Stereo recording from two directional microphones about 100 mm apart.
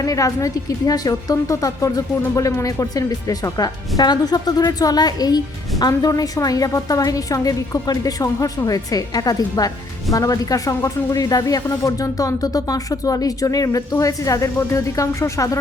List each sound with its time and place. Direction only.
0.0 s a woman's voice: 35° left (ahead or behind)